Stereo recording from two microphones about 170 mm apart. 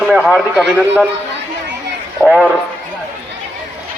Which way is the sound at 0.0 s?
5° right (ahead or behind).